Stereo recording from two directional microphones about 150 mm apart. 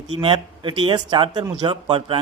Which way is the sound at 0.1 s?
35° right (ahead or behind).